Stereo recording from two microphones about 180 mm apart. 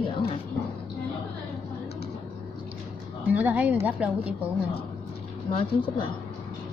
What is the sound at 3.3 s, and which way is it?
A woman's voice, 10° right (ahead or behind).